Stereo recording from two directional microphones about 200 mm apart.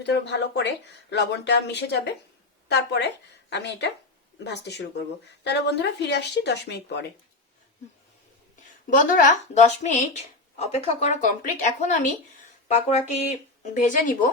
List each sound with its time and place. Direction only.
0.0 s a woman's voice: 60° left (ahead or behind)
8.9 s speech: 40° left (ahead or behind)